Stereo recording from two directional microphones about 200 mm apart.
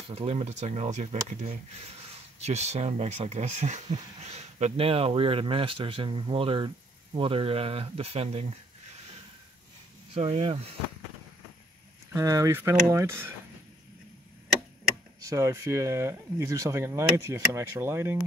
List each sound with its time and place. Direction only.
0.1 s speech: 30° right (ahead or behind)
10.1 s speech: 25° right (ahead or behind)
12.2 s speech: 15° right (ahead or behind)
15.2 s speech: 15° right (ahead or behind)